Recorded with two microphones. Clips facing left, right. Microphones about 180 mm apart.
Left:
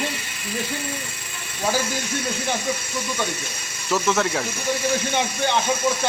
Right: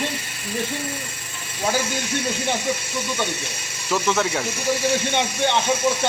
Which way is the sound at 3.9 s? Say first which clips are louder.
Even; centre (ahead or behind).